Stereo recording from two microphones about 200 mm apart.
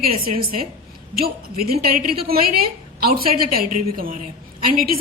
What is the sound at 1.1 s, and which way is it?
A woman's voice, 50° right (ahead or behind).